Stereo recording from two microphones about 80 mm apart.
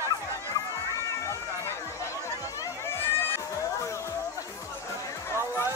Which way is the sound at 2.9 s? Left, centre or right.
Left.